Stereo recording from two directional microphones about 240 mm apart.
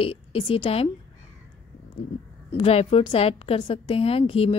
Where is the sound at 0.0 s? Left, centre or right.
Left.